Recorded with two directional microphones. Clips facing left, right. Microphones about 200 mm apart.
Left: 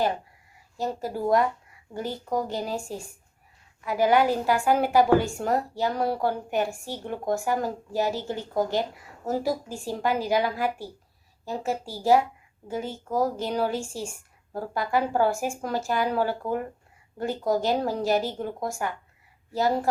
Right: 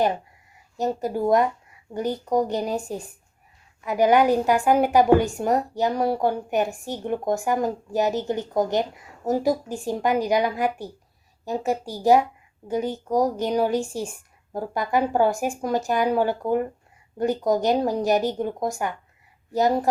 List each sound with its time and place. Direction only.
0.8 s a woman's voice: 20° right (ahead or behind)